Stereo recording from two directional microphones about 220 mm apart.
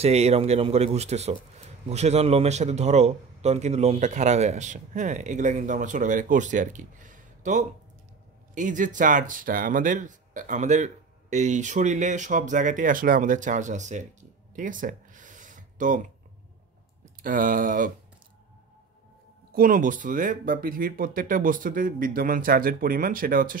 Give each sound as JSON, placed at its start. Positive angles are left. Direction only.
{"t": 0.0, "sound": "a man's voice", "side_deg": -30}
{"t": 14.5, "sound": "a sound", "side_deg": -35}
{"t": 17.2, "sound": "a man's voice", "side_deg": -40}
{"t": 19.5, "sound": "a man's voice", "side_deg": -40}